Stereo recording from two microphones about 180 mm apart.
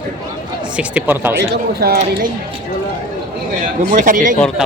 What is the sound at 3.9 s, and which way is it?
Speech, 45° right (ahead or behind).